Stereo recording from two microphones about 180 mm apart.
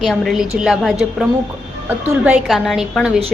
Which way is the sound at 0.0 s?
Centre (ahead or behind).